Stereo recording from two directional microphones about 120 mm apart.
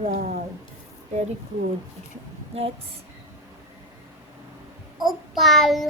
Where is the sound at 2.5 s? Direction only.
60° right (ahead or behind).